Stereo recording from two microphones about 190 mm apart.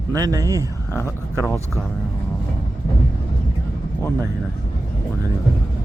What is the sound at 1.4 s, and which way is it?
Speech, 5° left (ahead or behind).